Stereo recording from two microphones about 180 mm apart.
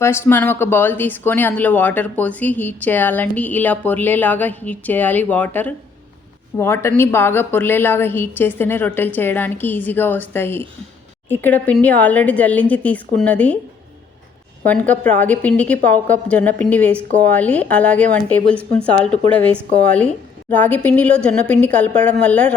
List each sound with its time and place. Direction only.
0.0 s speech: 15° left (ahead or behind)
14.6 s speech: 10° left (ahead or behind)